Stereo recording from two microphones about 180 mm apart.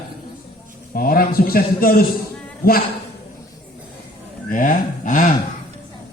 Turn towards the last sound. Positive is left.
turn(degrees=45)  # may be behind; listen again after turning